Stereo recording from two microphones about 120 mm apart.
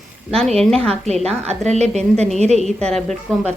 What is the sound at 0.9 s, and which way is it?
A woman's voice, 65° right (ahead or behind).